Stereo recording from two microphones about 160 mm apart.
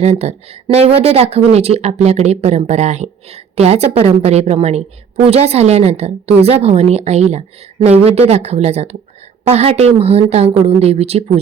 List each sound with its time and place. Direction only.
0.0 s speech: 40° right (ahead or behind)